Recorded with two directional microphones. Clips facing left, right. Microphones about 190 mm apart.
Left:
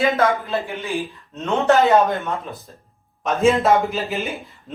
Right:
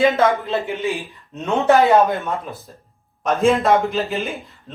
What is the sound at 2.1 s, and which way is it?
A man's voice, centre (ahead or behind).